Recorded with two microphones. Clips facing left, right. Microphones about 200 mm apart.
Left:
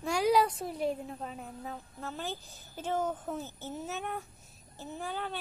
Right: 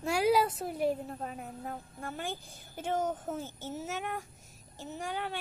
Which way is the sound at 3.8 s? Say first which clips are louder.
Even; 75° right (ahead or behind).